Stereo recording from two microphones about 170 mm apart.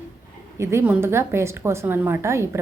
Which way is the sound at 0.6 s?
15° right (ahead or behind).